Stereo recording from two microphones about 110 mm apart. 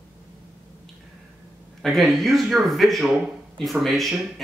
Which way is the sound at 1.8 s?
Centre (ahead or behind).